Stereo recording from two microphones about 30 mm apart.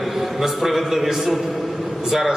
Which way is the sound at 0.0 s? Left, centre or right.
Centre.